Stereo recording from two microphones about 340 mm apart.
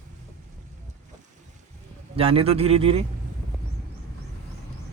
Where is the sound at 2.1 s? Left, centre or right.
Centre.